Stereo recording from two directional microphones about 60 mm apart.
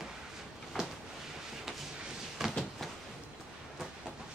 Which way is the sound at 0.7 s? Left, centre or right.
Centre.